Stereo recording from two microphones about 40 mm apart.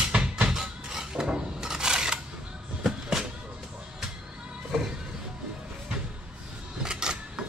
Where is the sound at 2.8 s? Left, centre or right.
Centre.